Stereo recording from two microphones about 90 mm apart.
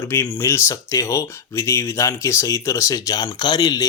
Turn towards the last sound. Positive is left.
turn(degrees=50)  # may be behind; listen again after turning